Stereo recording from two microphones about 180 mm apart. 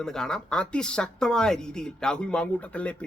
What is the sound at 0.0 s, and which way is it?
Speech, 5° left (ahead or behind).